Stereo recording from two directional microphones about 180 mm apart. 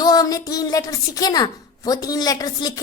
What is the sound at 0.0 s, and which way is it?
A woman's voice, 20° left (ahead or behind).